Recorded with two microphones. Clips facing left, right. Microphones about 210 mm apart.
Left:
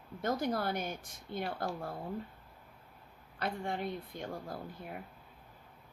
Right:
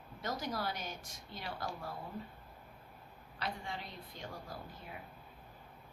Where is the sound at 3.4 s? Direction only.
55° left (ahead or behind).